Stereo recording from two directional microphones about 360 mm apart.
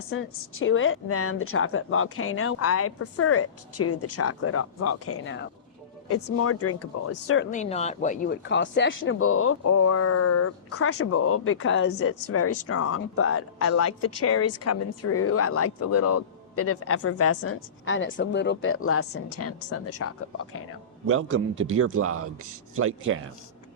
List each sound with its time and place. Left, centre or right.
0.1 s speech: left
7.5 s speech: centre; by 20.7 s left
21.1 s a man's voice: right